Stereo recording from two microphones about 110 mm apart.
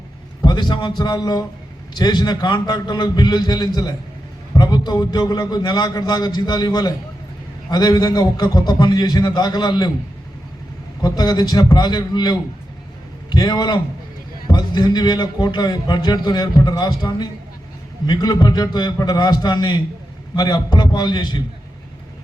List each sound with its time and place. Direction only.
0.4 s a man's voice: 40° left (ahead or behind)
11.0 s a man's voice: 40° left (ahead or behind)